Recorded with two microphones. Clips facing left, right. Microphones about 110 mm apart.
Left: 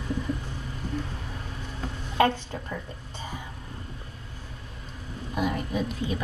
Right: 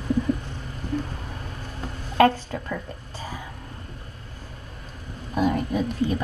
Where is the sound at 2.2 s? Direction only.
60° right (ahead or behind).